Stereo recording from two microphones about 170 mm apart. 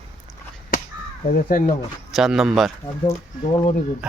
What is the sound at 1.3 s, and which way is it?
Speech, 50° left (ahead or behind).